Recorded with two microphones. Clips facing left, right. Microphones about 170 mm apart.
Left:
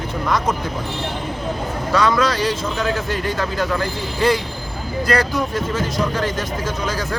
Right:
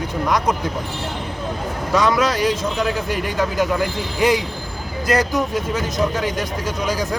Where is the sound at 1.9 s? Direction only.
15° right (ahead or behind).